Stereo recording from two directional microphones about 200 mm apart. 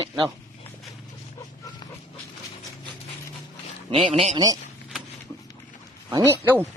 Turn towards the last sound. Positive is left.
turn(degrees=-10)  # may be behind; listen again after turning